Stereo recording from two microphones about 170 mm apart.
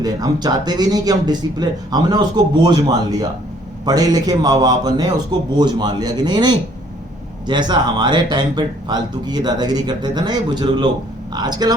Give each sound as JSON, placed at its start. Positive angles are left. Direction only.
{"t": 0.0, "sound": "speech", "side_deg": -20}